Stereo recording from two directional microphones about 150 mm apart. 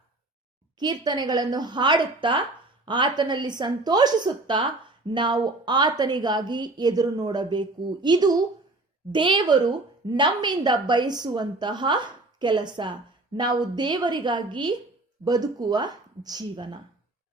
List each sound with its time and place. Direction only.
0.8 s a woman's voice: 30° right (ahead or behind)